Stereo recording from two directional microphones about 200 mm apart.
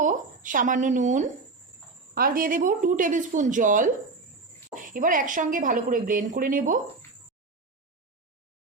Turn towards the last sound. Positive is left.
turn(degrees=-40)  # may be behind; listen again after turning